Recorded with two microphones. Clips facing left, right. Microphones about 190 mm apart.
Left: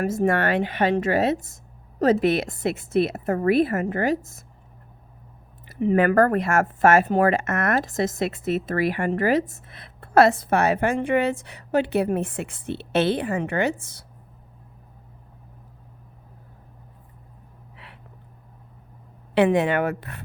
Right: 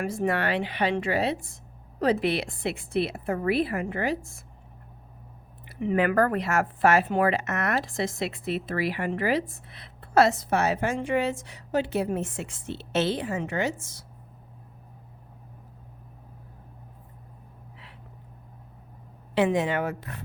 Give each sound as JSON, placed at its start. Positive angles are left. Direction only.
{"t": 0.0, "sound": "speech", "side_deg": 45}
{"t": 5.8, "sound": "speech", "side_deg": 40}
{"t": 19.3, "sound": "a woman's voice", "side_deg": 65}